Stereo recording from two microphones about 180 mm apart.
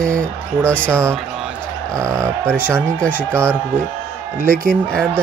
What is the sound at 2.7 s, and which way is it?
Speech, 5° left (ahead or behind).